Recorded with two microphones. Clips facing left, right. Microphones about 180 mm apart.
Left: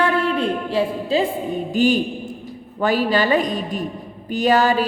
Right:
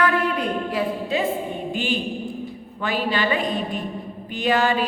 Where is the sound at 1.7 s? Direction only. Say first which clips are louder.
Left 9 dB; 40° left (ahead or behind).